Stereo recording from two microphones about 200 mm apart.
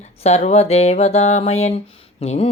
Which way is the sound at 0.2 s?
35° left (ahead or behind).